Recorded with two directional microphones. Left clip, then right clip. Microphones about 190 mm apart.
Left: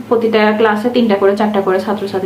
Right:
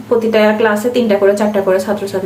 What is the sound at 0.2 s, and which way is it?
Speech, 10° left (ahead or behind).